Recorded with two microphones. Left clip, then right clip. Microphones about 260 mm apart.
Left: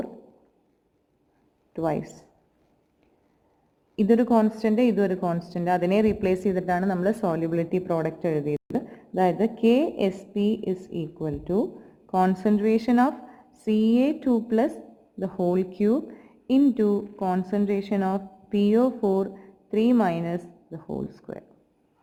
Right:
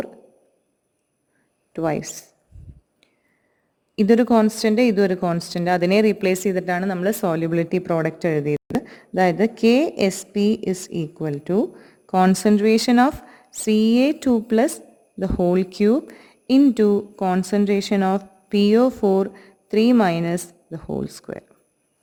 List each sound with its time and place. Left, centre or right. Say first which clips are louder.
1.7 s speech: right 4 dB; right
3.9 s speech: right 4 dB; right